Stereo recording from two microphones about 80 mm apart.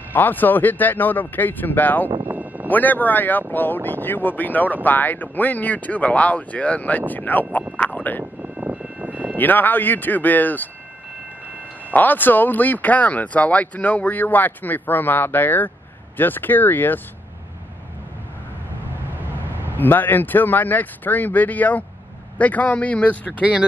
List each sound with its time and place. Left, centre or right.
0.1 s speech: left
2.2 s a sound: right
2.7 s speech: left
7.7 s a sound: left
8.4 s vehicle: right
9.4 s speech: left
11.9 s speech: left
19.8 s speech: left